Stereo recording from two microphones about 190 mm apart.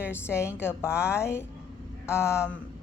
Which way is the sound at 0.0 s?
10° left (ahead or behind).